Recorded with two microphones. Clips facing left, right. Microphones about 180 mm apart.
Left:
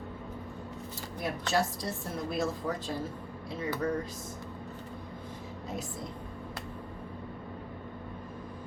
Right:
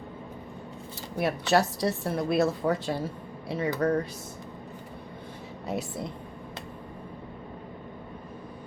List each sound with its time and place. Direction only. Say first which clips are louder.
1.2 s a woman's voice: right 6 dB; 70° right (ahead or behind)